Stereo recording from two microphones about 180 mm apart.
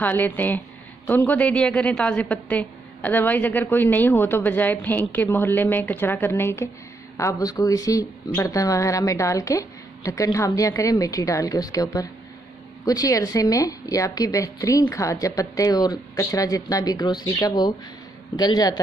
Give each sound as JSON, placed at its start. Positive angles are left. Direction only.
{"t": 0.0, "sound": "a woman's voice", "side_deg": 10}